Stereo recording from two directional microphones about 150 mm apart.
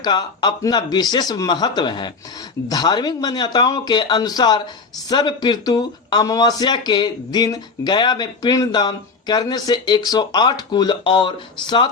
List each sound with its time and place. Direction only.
0.0 s speech: 30° left (ahead or behind)